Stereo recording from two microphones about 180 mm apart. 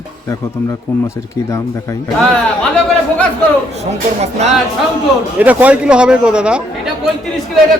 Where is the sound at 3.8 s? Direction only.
40° right (ahead or behind).